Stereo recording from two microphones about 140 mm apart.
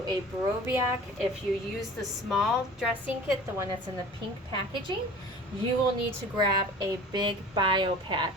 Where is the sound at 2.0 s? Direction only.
Centre (ahead or behind).